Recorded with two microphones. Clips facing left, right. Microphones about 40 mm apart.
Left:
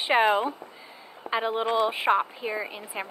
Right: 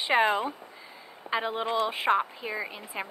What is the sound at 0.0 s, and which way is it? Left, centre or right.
Speech, left.